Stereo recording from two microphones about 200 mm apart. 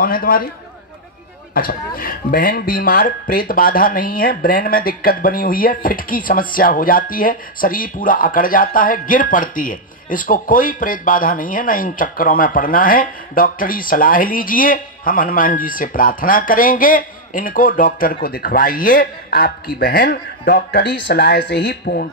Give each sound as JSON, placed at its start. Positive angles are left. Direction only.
{"t": 0.0, "sound": "speech", "side_deg": 45}
{"t": 1.5, "sound": "speech", "side_deg": 45}